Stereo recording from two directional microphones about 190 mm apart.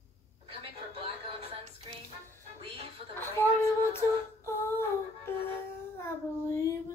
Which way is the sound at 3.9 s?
15° left (ahead or behind).